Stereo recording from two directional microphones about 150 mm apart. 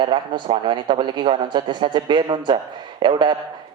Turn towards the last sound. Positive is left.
turn(degrees=-30)  # may be behind; listen again after turning